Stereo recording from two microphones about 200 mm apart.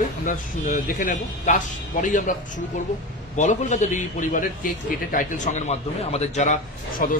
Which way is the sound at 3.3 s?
40° left (ahead or behind).